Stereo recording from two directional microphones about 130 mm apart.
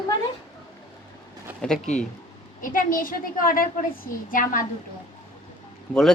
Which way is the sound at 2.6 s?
90° left.